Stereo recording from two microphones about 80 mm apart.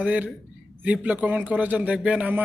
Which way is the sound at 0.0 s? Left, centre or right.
Centre.